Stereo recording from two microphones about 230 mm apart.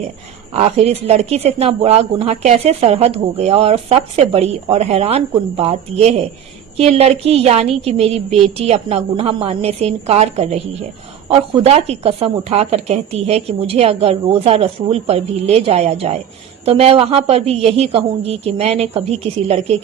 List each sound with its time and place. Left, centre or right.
0.5 s speech: right